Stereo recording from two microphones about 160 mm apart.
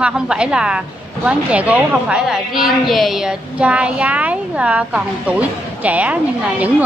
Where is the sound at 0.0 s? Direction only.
5° right (ahead or behind).